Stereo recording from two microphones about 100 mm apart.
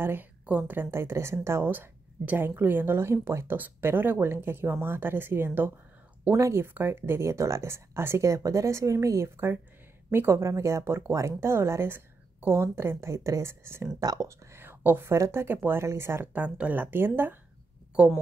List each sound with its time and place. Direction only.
0.0 s speech: 20° right (ahead or behind)
13.9 s speech: 40° right (ahead or behind)
16.3 s speech: 15° right (ahead or behind)